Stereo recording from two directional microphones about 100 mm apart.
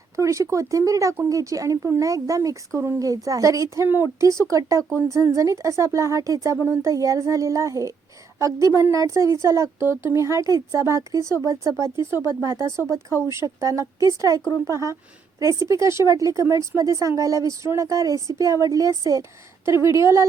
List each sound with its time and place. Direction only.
0.2 s speech: 30° right (ahead or behind)